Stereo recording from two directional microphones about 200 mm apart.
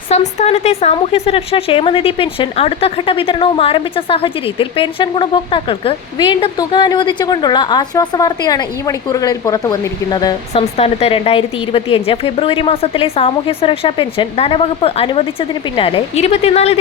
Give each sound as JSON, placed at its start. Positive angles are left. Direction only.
{"t": 0.1, "sound": "speech", "side_deg": 35}